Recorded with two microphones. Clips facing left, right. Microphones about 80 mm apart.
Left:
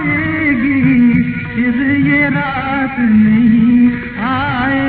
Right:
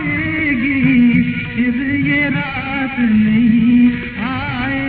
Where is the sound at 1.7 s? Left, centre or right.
Left.